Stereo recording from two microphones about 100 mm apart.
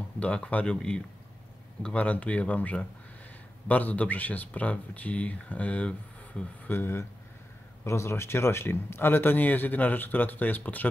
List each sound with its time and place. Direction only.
0.2 s speech: 10° left (ahead or behind)
6.7 s speech: 25° left (ahead or behind)